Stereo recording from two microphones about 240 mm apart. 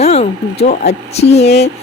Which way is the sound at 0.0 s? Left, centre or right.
Left.